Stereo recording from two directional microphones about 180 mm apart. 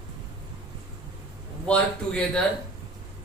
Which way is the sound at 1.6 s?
5° left (ahead or behind).